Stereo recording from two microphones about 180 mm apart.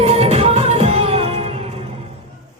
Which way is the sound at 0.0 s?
35° right (ahead or behind).